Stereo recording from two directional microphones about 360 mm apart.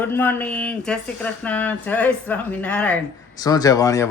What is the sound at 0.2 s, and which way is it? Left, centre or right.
Speech, centre.